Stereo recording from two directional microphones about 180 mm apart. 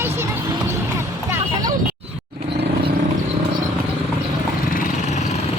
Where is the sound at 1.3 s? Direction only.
20° right (ahead or behind).